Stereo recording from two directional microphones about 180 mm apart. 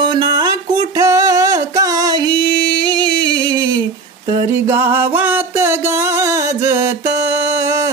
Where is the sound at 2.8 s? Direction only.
25° right (ahead or behind).